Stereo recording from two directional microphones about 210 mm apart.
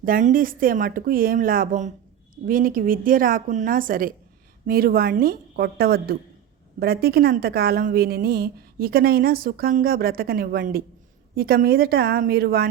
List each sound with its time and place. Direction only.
0.0 s a woman's voice: 40° right (ahead or behind)